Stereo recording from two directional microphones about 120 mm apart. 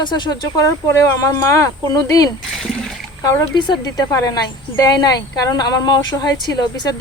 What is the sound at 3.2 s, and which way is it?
A woman's voice, 35° left (ahead or behind).